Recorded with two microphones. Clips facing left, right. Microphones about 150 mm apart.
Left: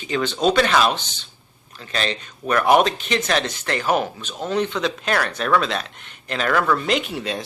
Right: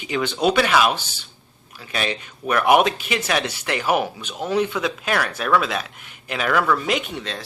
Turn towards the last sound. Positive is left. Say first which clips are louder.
# left 2 dB
turn(degrees=5)  # may be behind; listen again after turning